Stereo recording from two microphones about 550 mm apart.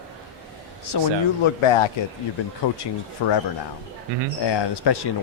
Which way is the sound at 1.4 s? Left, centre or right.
Left.